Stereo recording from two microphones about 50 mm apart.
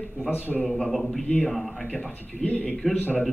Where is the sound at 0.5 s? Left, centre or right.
Centre.